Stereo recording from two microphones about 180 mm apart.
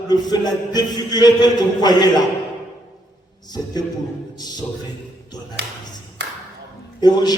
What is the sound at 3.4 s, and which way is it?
Speech, 20° left (ahead or behind).